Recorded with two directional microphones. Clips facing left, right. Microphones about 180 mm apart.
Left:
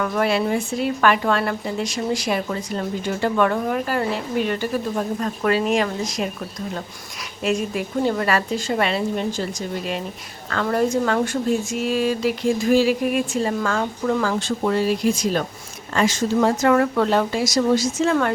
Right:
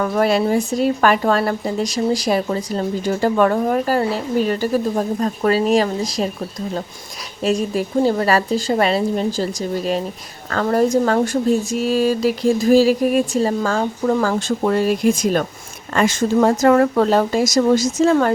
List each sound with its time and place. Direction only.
0.0 s speech: 40° right (ahead or behind)
7.4 s speech: 35° right (ahead or behind)